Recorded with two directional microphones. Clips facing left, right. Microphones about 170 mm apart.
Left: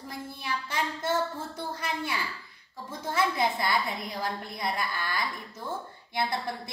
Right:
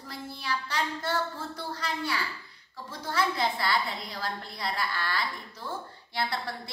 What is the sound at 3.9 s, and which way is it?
A woman's voice, 20° left (ahead or behind).